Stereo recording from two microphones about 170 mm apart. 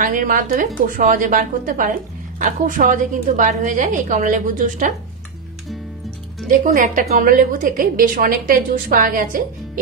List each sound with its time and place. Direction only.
0.0 s a woman's voice: 50° right (ahead or behind)
6.5 s a woman's voice: 50° right (ahead or behind)